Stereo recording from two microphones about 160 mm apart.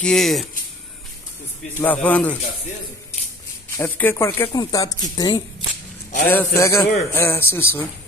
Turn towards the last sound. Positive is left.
turn(degrees=15)  # may be behind; listen again after turning